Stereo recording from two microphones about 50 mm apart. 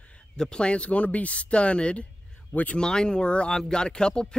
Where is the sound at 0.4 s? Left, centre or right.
Centre.